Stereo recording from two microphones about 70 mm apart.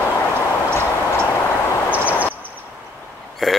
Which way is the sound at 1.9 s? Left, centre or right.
Right.